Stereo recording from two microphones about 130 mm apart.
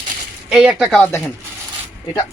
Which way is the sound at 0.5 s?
5° right (ahead or behind).